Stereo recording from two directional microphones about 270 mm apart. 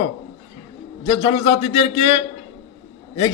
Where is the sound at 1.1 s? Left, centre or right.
Centre.